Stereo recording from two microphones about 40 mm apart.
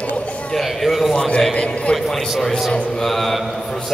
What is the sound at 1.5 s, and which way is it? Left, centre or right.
Speech, left.